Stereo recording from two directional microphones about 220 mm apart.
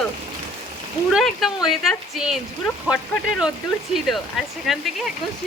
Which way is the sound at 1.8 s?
Centre (ahead or behind).